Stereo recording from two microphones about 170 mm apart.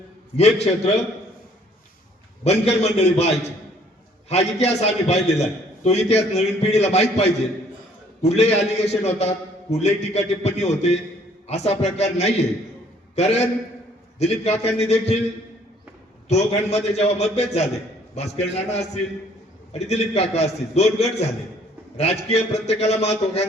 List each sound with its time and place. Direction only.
0.3 s a man's voice: 40° left (ahead or behind)
2.4 s a man's voice: 40° left (ahead or behind)
16.3 s a man's voice: 40° left (ahead or behind)